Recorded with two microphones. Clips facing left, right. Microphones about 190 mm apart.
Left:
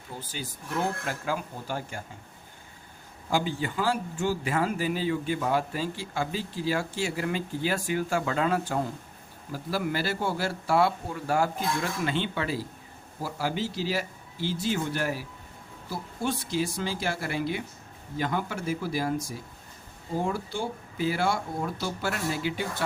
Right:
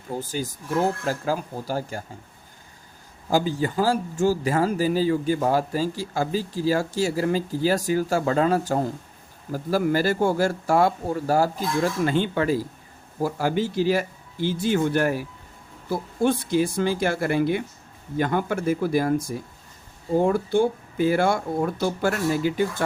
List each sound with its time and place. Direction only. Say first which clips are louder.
0.1 s speech: right 10 dB; 45° right (ahead or behind)
3.2 s speech: right 6 dB; 40° right (ahead or behind)